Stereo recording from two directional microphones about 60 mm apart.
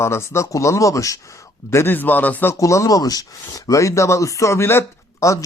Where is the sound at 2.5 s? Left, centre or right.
Left.